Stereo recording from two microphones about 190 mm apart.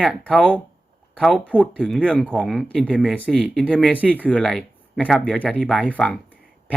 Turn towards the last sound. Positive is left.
turn(degrees=5)  # may be behind; listen again after turning